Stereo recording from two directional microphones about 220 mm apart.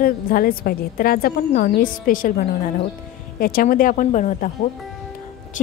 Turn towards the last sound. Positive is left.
turn(degrees=35)  # may be behind; listen again after turning